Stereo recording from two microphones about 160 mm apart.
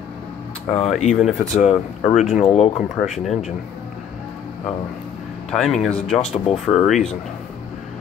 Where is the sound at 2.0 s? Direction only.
5° right (ahead or behind).